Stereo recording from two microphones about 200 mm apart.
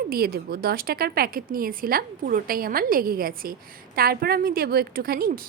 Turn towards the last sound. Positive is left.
turn(degrees=-50)  # may be behind; listen again after turning